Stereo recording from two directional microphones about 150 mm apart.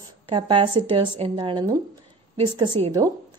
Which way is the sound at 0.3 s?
35° right (ahead or behind).